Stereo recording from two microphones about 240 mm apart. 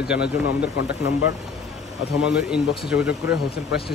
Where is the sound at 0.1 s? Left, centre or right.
Centre.